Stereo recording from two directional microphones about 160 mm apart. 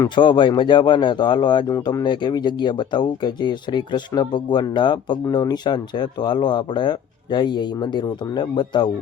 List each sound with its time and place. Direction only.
0.0 s speech: 30° left (ahead or behind)